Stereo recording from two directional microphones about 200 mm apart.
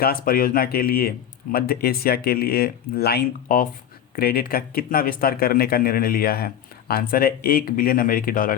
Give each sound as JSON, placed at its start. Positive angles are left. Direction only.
{"t": 0.0, "sound": "speech", "side_deg": 45}